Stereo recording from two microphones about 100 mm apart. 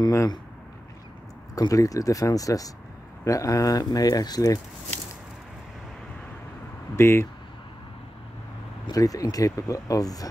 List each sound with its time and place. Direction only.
0.0 s speech: 30° left (ahead or behind)
1.5 s speech: 35° left (ahead or behind)
7.0 s speech: 25° left (ahead or behind)
8.9 s speech: 35° left (ahead or behind)